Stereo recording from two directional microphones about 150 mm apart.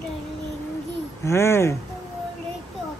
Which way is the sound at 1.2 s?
15° left (ahead or behind).